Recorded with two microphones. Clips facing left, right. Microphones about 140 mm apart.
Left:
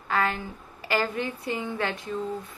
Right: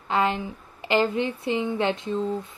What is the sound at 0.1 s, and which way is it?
Speech, 20° right (ahead or behind).